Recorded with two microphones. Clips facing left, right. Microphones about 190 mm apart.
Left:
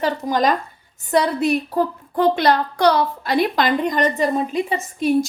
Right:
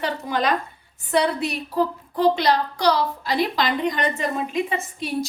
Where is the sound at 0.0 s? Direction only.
40° left (ahead or behind).